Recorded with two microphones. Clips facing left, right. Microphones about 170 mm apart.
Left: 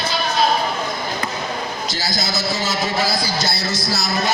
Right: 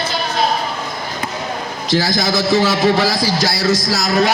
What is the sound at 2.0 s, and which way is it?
A man's voice, 90° right.